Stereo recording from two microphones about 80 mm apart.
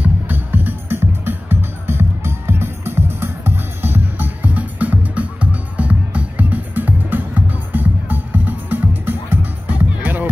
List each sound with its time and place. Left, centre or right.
0.0 s music: right